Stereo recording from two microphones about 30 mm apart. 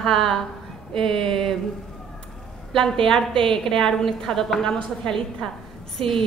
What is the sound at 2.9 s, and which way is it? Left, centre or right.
Speech, left.